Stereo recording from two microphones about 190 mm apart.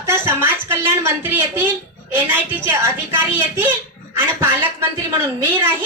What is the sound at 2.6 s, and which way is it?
A woman's voice, 10° right (ahead or behind).